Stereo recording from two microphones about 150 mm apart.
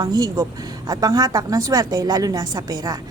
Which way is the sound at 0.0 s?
25° right (ahead or behind).